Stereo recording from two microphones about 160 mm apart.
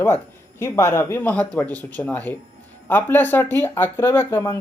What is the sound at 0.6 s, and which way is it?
Speech, 15° left (ahead or behind).